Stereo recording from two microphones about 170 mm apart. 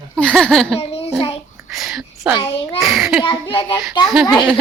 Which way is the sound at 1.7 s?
Centre (ahead or behind).